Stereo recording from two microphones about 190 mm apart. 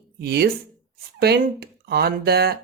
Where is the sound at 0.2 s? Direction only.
55° right (ahead or behind).